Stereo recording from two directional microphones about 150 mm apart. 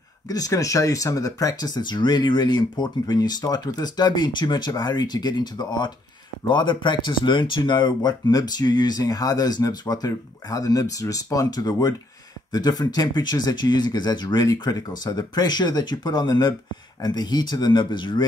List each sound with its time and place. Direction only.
0.3 s speech: 25° left (ahead or behind)